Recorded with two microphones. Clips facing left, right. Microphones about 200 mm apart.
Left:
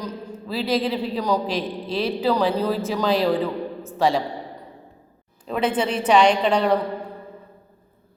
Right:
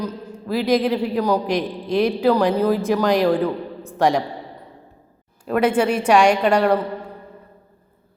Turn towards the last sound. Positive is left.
turn(degrees=-10)  # may be behind; listen again after turning